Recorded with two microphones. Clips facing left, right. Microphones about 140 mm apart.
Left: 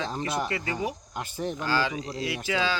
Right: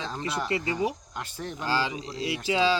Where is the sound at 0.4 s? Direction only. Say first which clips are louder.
Right 3 dB; 25° right (ahead or behind).